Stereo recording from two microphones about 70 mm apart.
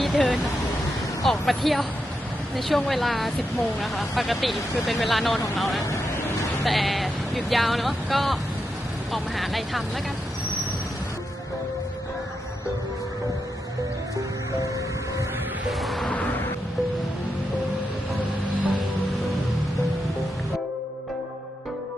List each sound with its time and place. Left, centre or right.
0.0 s a sound: centre
1.2 s speech: centre
5.8 s vehicle: left
6.7 s speech: centre
15.8 s music: centre